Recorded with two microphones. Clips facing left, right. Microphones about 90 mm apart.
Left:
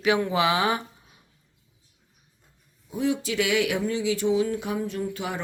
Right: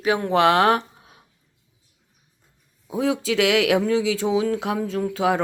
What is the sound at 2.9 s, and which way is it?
Speech, 90° right.